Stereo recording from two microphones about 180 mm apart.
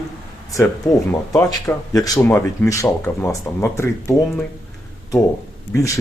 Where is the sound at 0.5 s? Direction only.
20° left (ahead or behind).